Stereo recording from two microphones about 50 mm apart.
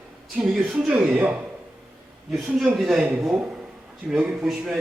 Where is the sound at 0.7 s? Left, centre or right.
Right.